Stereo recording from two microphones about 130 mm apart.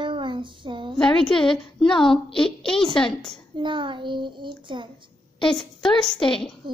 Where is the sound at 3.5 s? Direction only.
40° right (ahead or behind).